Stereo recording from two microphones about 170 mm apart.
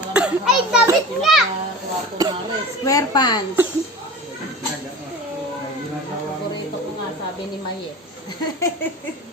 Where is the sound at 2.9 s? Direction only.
20° left (ahead or behind).